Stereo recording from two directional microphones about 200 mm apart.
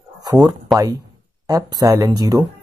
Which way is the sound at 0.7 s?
20° right (ahead or behind).